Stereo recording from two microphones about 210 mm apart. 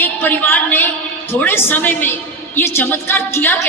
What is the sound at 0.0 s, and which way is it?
A woman's voice, 10° left (ahead or behind).